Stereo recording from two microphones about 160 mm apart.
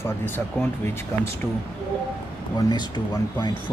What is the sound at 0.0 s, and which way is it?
Speech, 15° left (ahead or behind).